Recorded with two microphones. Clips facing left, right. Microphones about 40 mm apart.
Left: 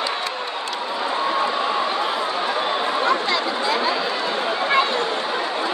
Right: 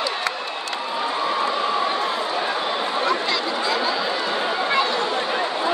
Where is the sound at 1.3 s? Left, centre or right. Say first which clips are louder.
Left 1 dB; centre.